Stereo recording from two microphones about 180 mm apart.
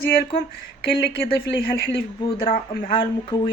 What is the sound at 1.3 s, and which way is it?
Speech, 65° left (ahead or behind).